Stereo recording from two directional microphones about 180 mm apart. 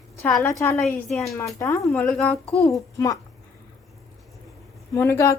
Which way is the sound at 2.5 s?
15° left (ahead or behind).